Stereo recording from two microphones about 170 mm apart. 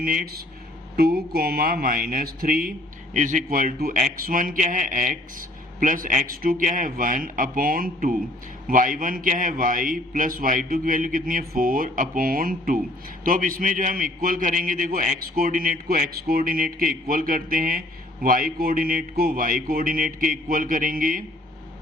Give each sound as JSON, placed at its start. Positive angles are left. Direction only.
{"t": 0.0, "sound": "a man's voice", "side_deg": -55}